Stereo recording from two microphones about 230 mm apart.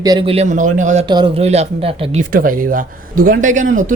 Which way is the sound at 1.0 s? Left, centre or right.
Centre.